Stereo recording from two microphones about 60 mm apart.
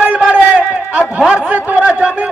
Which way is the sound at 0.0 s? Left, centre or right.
Right.